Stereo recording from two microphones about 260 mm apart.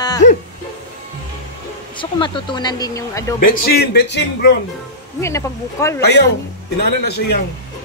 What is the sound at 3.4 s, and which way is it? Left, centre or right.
Speech, left.